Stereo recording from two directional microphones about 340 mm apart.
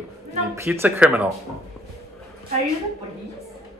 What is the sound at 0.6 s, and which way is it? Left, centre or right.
Speech, centre.